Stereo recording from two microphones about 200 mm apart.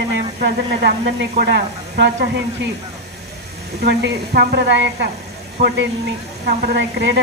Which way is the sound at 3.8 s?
55° right (ahead or behind).